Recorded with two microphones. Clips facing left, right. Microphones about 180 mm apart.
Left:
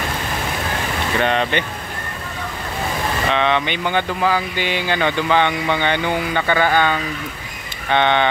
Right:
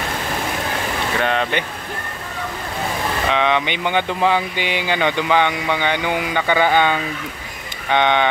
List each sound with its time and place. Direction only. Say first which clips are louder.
1.2 s speech: left 2 dB; 5° right (ahead or behind)
3.3 s speech: even; 10° right (ahead or behind)